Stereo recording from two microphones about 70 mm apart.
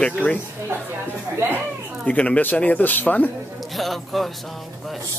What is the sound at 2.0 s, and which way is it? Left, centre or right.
Speech, centre.